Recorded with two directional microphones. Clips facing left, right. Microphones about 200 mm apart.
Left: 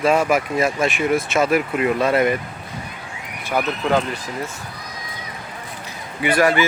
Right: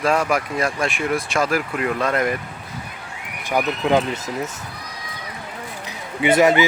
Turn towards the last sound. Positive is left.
turn(degrees=-20)  # may be behind; listen again after turning